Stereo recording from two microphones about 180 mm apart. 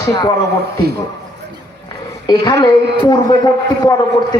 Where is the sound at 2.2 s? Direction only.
25° left (ahead or behind).